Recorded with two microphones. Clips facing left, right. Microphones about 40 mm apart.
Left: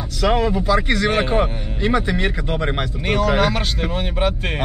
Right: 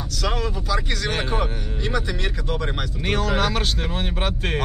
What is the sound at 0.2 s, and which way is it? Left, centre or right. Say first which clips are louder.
Speech: left 9 dB; left.